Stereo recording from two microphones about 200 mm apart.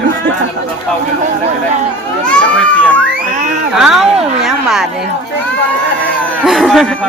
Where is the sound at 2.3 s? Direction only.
5° left (ahead or behind).